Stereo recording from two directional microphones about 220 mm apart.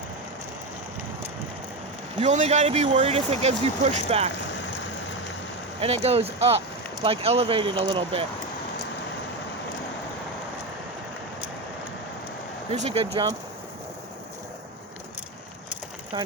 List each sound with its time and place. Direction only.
2.1 s speech: 30° right (ahead or behind)
5.8 s speech: 25° right (ahead or behind)
12.7 s speech: 30° right (ahead or behind)
16.1 s speech: 25° right (ahead or behind)